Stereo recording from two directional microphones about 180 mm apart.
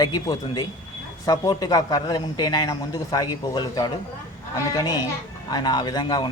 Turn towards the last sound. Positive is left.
turn(degrees=25)  # may be behind; listen again after turning